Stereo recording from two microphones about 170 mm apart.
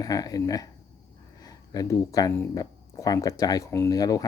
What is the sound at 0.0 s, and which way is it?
Speech, 20° left (ahead or behind).